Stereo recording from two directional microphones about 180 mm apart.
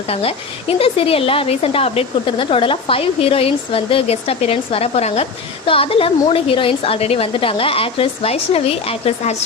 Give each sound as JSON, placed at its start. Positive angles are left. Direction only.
{"t": 0.1, "sound": "a woman's voice", "side_deg": 30}